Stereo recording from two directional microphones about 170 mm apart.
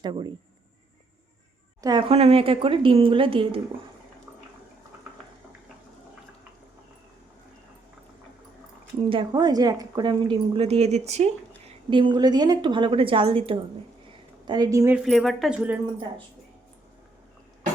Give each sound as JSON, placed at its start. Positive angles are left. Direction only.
{"t": 0.0, "sound": "a woman's voice", "side_deg": -25}
{"t": 1.8, "sound": "a woman's voice", "side_deg": -25}
{"t": 9.0, "sound": "a woman's voice", "side_deg": -30}
{"t": 11.9, "sound": "a woman's voice", "side_deg": -30}
{"t": 14.1, "sound": "a sound", "side_deg": -25}
{"t": 14.9, "sound": "speech", "side_deg": 0}